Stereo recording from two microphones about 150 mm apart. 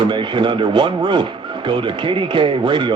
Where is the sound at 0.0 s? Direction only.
35° right (ahead or behind).